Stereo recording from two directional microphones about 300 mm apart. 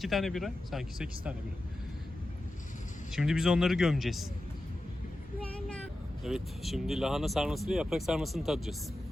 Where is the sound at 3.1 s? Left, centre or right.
Centre.